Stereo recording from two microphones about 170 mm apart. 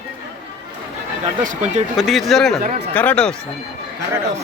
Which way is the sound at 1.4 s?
50° right (ahead or behind).